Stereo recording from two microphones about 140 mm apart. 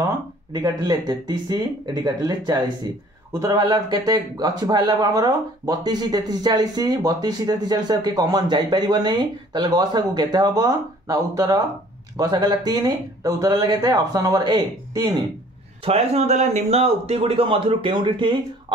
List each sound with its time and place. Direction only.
0.5 s speech: 30° right (ahead or behind)
15.8 s speech: 45° right (ahead or behind)